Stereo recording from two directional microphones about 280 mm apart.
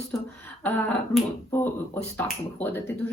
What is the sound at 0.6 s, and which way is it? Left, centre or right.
Speech, centre.